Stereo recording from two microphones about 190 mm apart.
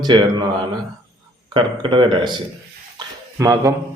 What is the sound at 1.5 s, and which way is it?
A man's voice, 25° right (ahead or behind).